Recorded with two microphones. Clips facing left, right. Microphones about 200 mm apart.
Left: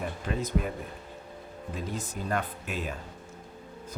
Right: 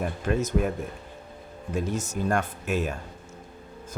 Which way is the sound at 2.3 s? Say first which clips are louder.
Right 4 dB; 45° right (ahead or behind).